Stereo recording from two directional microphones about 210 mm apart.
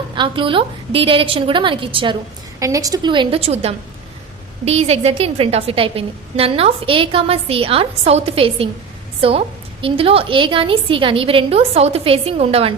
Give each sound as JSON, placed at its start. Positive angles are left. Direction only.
{"t": 0.2, "sound": "a woman's voice", "side_deg": -25}